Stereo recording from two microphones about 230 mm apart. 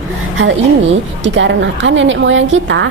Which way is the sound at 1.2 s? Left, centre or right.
Right.